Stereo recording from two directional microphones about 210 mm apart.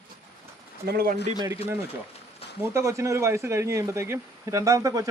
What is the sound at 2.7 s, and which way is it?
A man's voice, 15° right (ahead or behind).